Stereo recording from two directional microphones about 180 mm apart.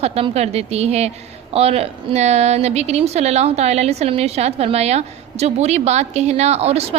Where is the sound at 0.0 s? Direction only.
35° right (ahead or behind).